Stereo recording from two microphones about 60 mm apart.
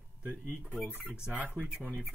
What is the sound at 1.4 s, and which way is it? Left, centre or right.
Speech, right.